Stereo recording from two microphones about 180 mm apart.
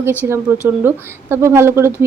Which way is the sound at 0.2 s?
15° right (ahead or behind).